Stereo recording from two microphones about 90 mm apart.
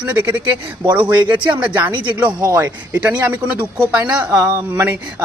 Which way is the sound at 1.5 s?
15° right (ahead or behind).